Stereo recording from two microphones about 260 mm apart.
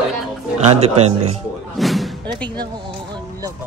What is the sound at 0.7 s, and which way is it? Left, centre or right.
Speech, right.